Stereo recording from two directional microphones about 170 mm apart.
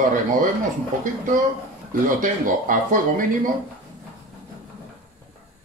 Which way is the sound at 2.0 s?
50° right (ahead or behind).